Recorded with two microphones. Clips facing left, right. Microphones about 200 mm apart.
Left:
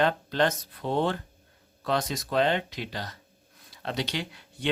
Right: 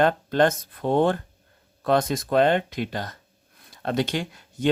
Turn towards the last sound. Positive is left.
turn(degrees=-45)  # may be behind; listen again after turning